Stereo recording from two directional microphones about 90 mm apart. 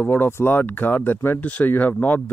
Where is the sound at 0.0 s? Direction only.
25° left (ahead or behind).